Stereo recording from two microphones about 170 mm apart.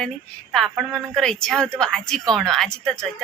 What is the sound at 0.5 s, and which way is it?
A woman's voice, centre (ahead or behind).